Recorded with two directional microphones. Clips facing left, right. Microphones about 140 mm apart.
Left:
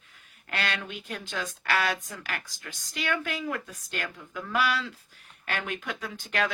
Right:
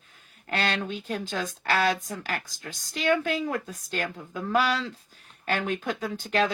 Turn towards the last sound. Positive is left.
turn(degrees=-35)  # may be behind; listen again after turning